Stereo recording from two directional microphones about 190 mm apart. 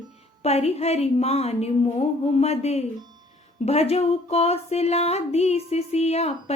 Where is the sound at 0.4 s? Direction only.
35° left (ahead or behind).